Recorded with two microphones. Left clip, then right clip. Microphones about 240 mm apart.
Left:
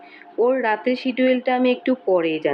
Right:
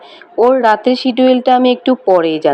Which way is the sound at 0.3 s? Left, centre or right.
Right.